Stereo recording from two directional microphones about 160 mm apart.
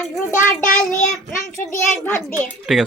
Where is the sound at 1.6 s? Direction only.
15° left (ahead or behind).